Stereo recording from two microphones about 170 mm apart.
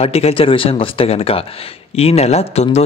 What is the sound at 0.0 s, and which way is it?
Speech, 35° left (ahead or behind).